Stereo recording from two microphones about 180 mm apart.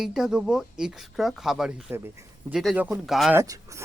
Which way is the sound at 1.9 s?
15° right (ahead or behind).